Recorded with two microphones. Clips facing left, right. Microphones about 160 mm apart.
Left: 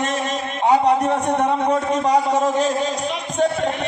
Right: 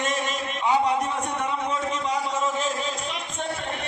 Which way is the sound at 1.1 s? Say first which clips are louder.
Left 9 dB; 70° left (ahead or behind).